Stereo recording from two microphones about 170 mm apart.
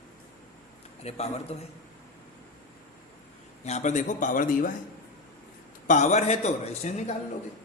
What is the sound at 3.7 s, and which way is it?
A man's voice, 45° left (ahead or behind).